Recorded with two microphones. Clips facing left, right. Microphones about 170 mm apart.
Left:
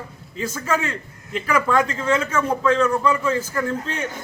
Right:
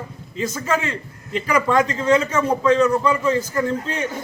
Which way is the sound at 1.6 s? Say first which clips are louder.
Right 5 dB; 30° right (ahead or behind).